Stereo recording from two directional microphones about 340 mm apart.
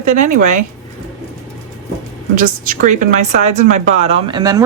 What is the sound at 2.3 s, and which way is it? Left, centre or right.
Speech, right.